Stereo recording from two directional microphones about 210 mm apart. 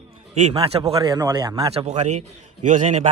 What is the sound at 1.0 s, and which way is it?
A man's voice, 15° right (ahead or behind).